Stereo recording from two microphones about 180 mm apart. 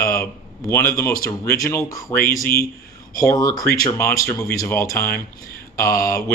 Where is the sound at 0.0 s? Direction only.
15° left (ahead or behind).